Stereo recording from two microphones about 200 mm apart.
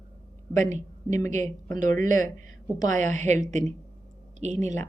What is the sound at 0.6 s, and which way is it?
Speech, 35° right (ahead or behind).